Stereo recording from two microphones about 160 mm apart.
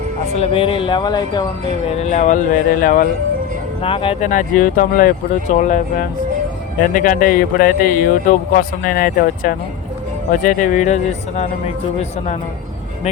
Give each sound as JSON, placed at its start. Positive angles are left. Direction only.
{"t": 0.3, "sound": "speech", "side_deg": 35}
{"t": 1.9, "sound": "speech", "side_deg": 45}
{"t": 3.8, "sound": "speech", "side_deg": 35}
{"t": 4.2, "sound": "speech", "side_deg": 55}